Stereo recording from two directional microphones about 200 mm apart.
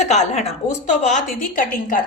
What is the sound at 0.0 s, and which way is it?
Speech, 35° left (ahead or behind).